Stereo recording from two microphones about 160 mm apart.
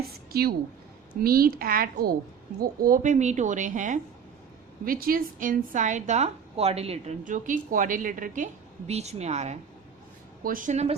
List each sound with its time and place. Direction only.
0.3 s a woman's voice: 75° right (ahead or behind); by 4.0 s 50° right (ahead or behind)
4.9 s a woman's voice: 65° right (ahead or behind)
8.9 s a woman's voice: 40° right (ahead or behind)
10.4 s a woman's voice: 60° right (ahead or behind)